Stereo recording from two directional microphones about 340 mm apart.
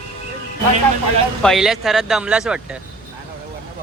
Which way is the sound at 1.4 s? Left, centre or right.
Centre.